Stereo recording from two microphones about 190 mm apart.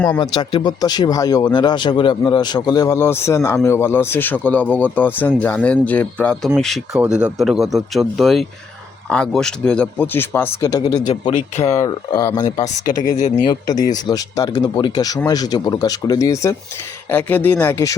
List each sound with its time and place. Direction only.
0.1 s speech: 25° left (ahead or behind)
11.3 s speech: 35° left (ahead or behind)
11.9 s speech: 15° left (ahead or behind)
12.6 s speech: 45° left (ahead or behind)
13.5 s speech: 20° left (ahead or behind)